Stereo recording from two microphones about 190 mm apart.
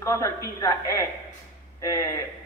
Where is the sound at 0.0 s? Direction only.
15° left (ahead or behind).